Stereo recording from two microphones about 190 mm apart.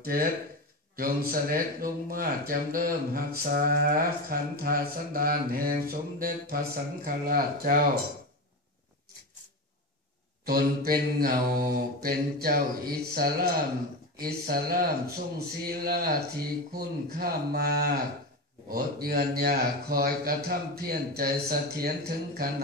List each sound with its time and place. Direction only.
0.0 s speech: 50° right (ahead or behind)
10.4 s speech: 50° right (ahead or behind)